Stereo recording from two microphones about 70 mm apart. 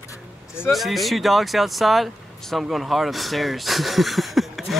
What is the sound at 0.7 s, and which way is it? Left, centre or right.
Speech, centre.